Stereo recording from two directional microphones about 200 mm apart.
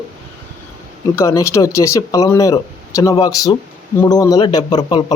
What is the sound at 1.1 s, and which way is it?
Speech, 15° left (ahead or behind).